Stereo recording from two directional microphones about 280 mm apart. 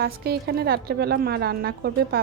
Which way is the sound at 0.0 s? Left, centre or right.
Right.